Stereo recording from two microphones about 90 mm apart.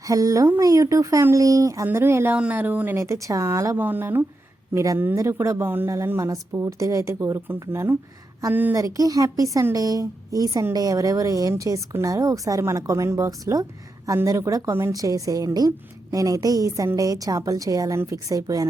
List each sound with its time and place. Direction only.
0.1 s a woman's voice: 40° right (ahead or behind)
2.3 s speech: 15° right (ahead or behind); by 3.8 s 35° right (ahead or behind)
3.8 s speech: 20° right (ahead or behind)
4.7 s a woman's voice: 40° right (ahead or behind)
8.7 s a woman's voice: 40° right (ahead or behind)
14.9 s a woman's voice: 40° right (ahead or behind)